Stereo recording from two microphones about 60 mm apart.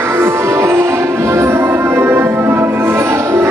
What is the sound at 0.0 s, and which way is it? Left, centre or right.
Music, right.